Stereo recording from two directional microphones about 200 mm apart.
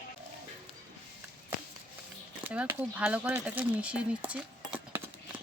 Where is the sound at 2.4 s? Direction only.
5° right (ahead or behind).